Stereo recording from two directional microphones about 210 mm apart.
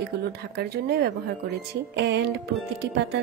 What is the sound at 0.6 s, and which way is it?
A woman's voice, 50° right (ahead or behind).